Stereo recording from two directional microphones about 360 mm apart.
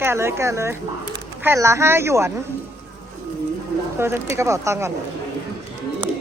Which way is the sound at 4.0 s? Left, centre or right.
Centre.